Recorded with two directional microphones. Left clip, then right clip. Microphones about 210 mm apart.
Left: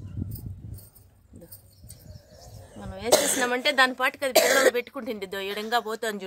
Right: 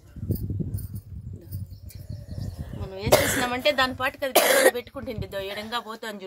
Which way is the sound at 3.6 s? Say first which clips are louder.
Left 2 dB; 50° left (ahead or behind).